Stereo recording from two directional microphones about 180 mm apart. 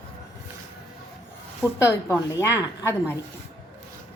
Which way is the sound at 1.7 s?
15° left (ahead or behind).